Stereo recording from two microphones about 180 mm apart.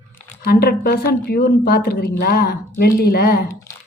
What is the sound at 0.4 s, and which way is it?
A woman's voice, 60° left (ahead or behind).